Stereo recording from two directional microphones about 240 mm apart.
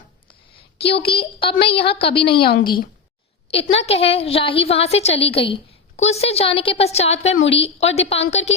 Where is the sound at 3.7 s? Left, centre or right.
Left.